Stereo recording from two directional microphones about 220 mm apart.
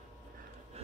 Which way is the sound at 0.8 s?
25° right (ahead or behind).